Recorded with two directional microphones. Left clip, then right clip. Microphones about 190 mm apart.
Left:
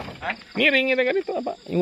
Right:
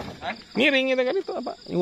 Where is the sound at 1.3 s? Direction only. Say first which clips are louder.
Left 3 dB; 15° left (ahead or behind).